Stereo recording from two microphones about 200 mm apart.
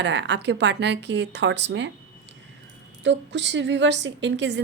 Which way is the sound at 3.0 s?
60° right (ahead or behind).